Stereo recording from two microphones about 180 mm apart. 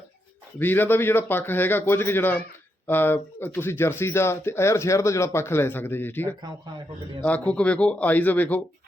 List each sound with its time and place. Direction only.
0.6 s speech: 10° left (ahead or behind)